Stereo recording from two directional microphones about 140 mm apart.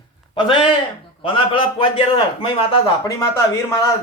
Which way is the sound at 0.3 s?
35° left (ahead or behind).